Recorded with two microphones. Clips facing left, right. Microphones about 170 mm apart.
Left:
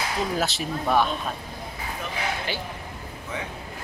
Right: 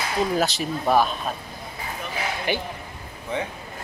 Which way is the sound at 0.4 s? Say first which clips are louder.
Right 3 dB; centre (ahead or behind).